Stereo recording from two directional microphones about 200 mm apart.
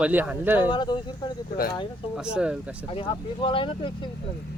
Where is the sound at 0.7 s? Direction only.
20° left (ahead or behind).